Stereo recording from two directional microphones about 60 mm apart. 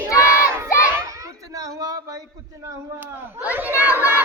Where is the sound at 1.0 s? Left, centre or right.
Right.